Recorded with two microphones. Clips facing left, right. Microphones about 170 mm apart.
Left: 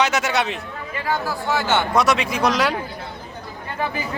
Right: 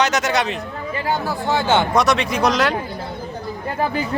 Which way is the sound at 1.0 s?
20° right (ahead or behind).